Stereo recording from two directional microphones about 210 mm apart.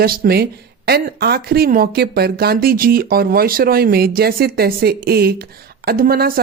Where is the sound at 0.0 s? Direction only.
45° right (ahead or behind).